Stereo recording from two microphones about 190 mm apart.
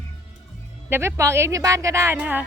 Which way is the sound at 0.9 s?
15° right (ahead or behind).